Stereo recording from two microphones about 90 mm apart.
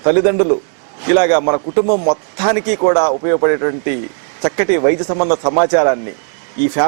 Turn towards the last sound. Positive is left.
turn(degrees=-15)  # may be behind; listen again after turning